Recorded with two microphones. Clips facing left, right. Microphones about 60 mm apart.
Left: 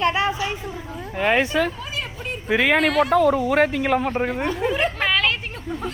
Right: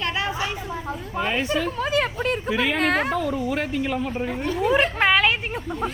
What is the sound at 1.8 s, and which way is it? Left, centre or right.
Vehicle, right.